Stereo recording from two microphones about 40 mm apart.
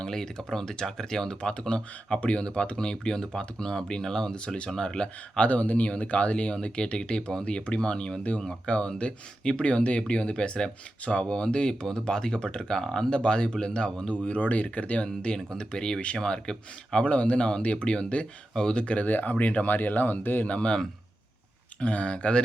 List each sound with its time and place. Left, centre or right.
0.0 s speech: centre
2.2 s speech: left
2.6 s speech: left
4.4 s speech: left
5.4 s speech: left
14.3 s speech: left
15.0 s speech: left
17.1 s speech: left
19.0 s speech: left
19.7 s speech: left
20.4 s speech: left
21.8 s speech: left